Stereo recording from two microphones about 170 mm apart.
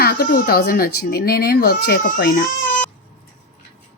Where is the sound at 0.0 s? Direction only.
60° left (ahead or behind).